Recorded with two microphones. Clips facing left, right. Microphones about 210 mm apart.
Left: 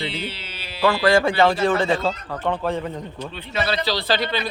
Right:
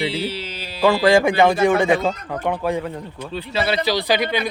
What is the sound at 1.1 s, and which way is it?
Speech, 15° right (ahead or behind).